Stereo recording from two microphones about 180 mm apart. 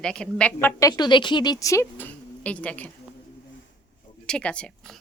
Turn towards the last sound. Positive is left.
turn(degrees=5)  # may be behind; listen again after turning